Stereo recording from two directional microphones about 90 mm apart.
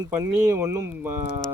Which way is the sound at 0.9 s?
25° right (ahead or behind).